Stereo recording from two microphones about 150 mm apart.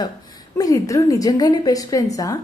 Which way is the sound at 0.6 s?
20° left (ahead or behind).